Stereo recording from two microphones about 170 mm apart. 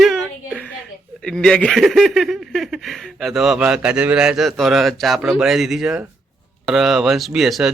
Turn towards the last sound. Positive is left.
turn(degrees=0)  # may be behind; listen again after turning